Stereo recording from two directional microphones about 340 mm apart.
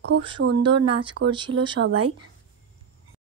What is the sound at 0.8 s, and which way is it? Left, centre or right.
Speech, centre.